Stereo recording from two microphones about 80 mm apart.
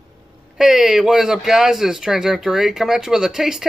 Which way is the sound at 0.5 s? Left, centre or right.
Centre.